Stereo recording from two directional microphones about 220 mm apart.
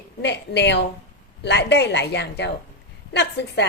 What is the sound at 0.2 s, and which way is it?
Speech, 50° left (ahead or behind).